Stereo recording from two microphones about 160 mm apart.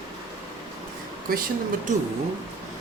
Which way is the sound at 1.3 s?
65° right (ahead or behind).